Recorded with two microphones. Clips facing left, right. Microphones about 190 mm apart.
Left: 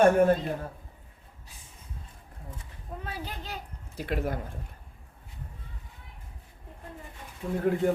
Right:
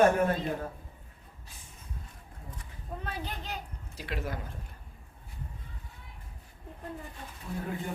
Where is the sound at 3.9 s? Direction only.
55° left (ahead or behind).